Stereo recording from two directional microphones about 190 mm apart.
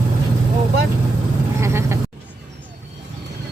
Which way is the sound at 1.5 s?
15° right (ahead or behind).